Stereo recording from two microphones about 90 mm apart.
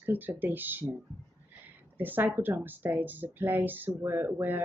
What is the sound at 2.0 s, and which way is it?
Speech, 20° right (ahead or behind).